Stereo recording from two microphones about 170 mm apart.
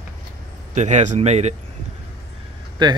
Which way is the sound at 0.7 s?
45° right (ahead or behind).